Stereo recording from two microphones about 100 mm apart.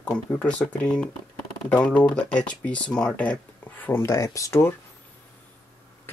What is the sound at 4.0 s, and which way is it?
Speech, 30° left (ahead or behind).